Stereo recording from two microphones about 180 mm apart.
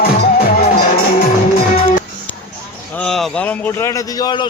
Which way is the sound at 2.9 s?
5° left (ahead or behind).